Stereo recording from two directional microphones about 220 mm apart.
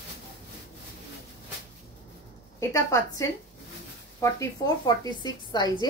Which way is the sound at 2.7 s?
15° left (ahead or behind).